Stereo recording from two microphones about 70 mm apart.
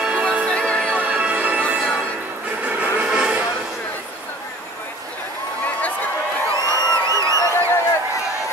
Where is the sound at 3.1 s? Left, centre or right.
Centre.